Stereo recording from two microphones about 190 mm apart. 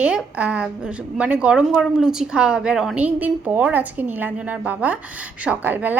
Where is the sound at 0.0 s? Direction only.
5° right (ahead or behind).